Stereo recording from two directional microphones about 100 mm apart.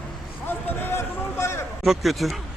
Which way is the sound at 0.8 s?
25° left (ahead or behind).